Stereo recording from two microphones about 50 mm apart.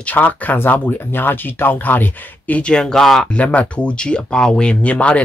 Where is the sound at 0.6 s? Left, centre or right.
Left.